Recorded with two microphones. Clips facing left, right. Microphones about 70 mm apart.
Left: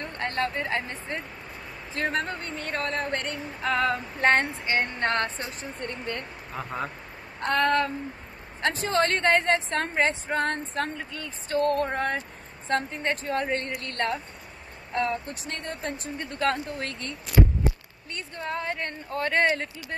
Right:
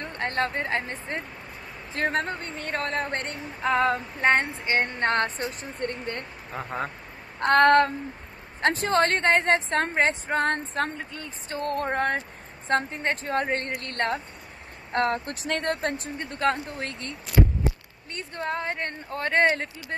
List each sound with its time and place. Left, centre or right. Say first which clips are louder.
0.0 s speech: right 1 dB; right
4.2 s speech: even; centre
4.6 s speech: right 2 dB; right
7.3 s a sound: right 6 dB; right
8.7 s speech: even; right
14.9 s speech: right 3 dB; right
16.2 s speech: right 1 dB; right
18.1 s speech: right 2 dB; right